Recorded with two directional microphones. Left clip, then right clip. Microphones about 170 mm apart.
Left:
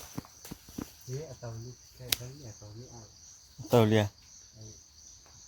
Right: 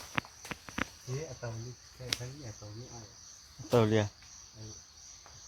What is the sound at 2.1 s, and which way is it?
Speech, 90° left.